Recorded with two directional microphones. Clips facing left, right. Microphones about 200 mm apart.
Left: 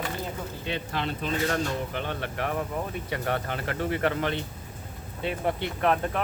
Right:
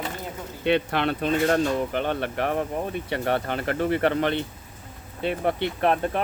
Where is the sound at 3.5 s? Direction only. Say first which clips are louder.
Right 5 dB; 45° right (ahead or behind).